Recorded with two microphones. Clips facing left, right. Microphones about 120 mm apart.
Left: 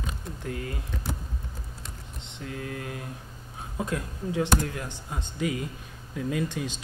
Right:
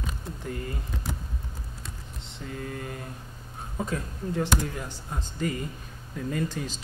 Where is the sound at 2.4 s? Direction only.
Centre (ahead or behind).